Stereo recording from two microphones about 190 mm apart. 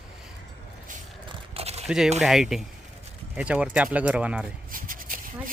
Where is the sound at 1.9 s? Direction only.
5° right (ahead or behind).